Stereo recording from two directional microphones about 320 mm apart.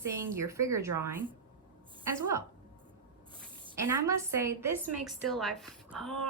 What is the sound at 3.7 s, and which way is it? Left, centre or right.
A woman's voice, centre.